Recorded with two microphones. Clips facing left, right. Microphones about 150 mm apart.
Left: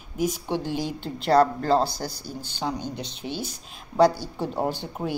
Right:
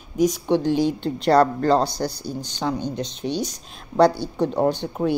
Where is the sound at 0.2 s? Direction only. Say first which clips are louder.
Right 7 dB; 5° left (ahead or behind).